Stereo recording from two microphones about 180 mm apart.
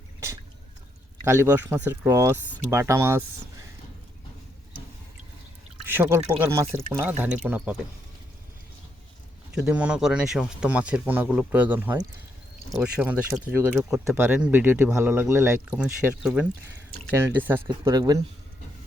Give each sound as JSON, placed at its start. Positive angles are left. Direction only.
{"t": 1.2, "sound": "speech", "side_deg": -15}
{"t": 5.8, "sound": "speech", "side_deg": -10}
{"t": 9.6, "sound": "speech", "side_deg": -5}